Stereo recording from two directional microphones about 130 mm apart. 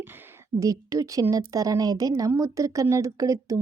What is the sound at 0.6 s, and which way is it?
A woman's voice, 25° right (ahead or behind).